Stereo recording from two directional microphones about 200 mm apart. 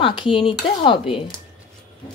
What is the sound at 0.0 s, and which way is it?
A woman's voice, 25° left (ahead or behind).